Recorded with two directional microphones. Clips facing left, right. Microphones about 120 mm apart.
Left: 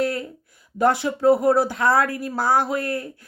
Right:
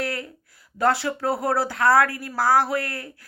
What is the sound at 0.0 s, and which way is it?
Speech, 20° left (ahead or behind).